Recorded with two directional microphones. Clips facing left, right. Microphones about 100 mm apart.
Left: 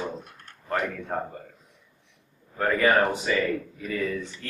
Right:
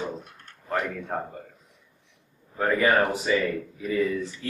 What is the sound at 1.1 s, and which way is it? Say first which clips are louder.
Speech: even; 5° right (ahead or behind).